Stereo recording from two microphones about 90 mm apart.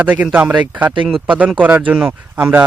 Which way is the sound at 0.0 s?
15° right (ahead or behind).